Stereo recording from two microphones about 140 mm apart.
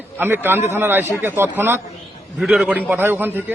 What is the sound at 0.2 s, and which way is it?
A man's voice, 15° right (ahead or behind).